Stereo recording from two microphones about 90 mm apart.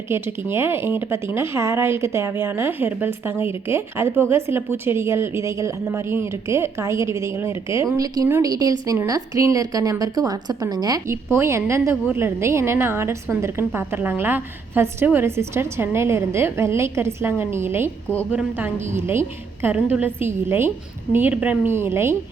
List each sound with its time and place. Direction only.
0.1 s a woman's voice: 25° right (ahead or behind); by 11.0 s 45° right (ahead or behind)
11.1 s speech: 30° right (ahead or behind)